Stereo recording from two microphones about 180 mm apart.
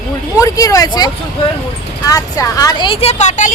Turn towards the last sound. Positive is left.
turn(degrees=40)  # may be behind; listen again after turning